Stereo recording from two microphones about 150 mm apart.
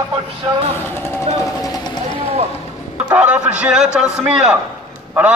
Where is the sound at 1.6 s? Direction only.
25° left (ahead or behind).